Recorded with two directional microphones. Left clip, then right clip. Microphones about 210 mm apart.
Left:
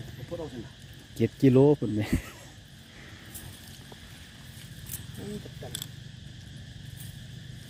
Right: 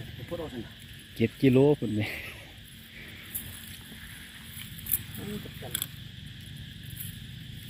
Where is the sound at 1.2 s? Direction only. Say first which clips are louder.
Left 1 dB; 15° left (ahead or behind).